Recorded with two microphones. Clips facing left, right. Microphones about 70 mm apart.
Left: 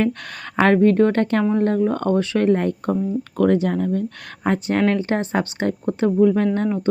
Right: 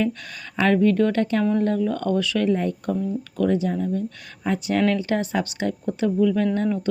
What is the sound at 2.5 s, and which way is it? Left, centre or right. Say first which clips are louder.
Speech: left 4 dB; left.